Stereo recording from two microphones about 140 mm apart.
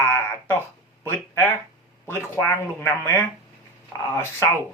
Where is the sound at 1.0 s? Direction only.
15° left (ahead or behind).